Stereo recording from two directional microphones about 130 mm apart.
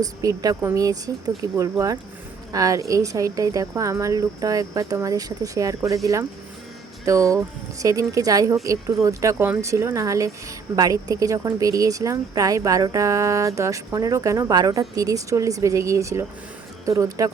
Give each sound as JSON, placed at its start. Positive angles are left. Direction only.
{"t": 0.0, "sound": "speech", "side_deg": -30}